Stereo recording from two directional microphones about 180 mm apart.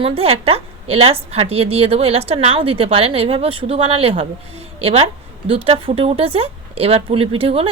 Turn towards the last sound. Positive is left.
turn(degrees=-30)  # may be behind; listen again after turning